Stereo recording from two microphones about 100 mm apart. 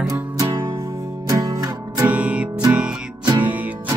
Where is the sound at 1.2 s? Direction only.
35° right (ahead or behind).